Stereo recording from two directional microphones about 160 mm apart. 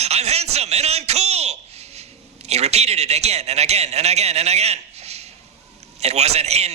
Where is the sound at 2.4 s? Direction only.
40° right (ahead or behind).